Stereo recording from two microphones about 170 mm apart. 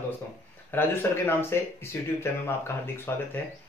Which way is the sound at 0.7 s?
15° left (ahead or behind).